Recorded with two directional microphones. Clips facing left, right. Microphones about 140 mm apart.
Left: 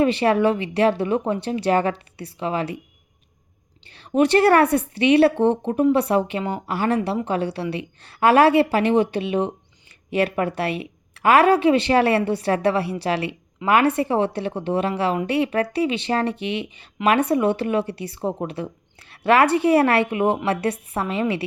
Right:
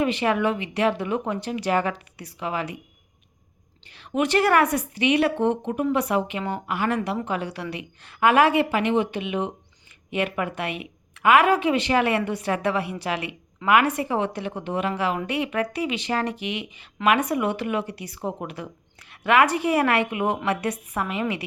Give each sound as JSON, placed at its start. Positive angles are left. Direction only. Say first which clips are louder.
{"t": 0.0, "sound": "a woman's voice", "louder": "left 5 dB", "side_deg": 35}
{"t": 3.9, "sound": "a woman's voice", "louder": "left 5 dB", "side_deg": 30}